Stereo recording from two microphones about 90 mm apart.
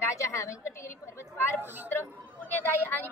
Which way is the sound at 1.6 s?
20° right (ahead or behind).